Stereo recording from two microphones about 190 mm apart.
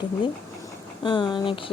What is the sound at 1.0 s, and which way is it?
Speech, 25° left (ahead or behind).